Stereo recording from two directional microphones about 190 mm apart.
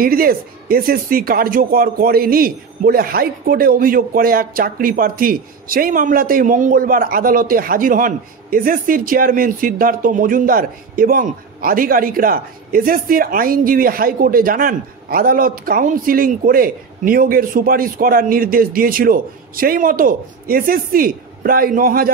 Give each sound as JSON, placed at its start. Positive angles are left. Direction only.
{"t": 0.0, "sound": "speech", "side_deg": -50}